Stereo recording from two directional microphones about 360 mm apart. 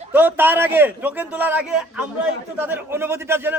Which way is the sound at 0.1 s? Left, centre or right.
Centre.